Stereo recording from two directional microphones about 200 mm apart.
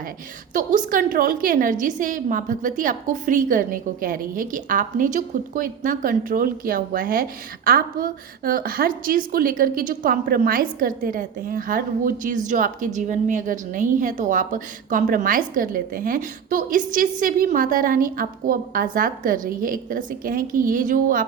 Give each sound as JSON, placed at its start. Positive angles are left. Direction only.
{"t": 0.5, "sound": "a woman's voice", "side_deg": -40}